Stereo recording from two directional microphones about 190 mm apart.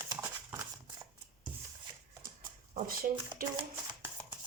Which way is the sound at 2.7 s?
50° right (ahead or behind).